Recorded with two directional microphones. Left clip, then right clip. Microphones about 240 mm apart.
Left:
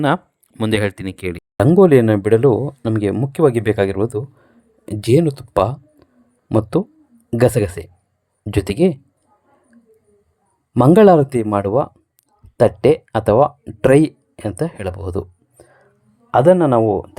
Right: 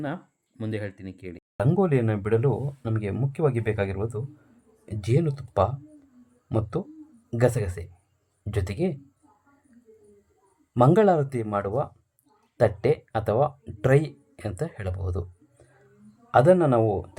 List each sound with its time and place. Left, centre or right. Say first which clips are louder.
0.0 s speech: left 16 dB; left
10.8 s speech: left 9 dB; left